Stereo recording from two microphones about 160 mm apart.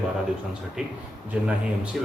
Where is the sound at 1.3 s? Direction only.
5° right (ahead or behind).